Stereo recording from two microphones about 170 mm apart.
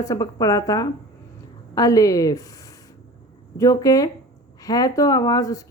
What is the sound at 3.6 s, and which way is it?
A woman's voice, 20° left (ahead or behind).